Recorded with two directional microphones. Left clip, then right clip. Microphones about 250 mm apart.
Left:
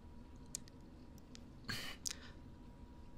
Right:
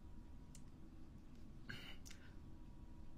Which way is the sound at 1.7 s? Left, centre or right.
Left.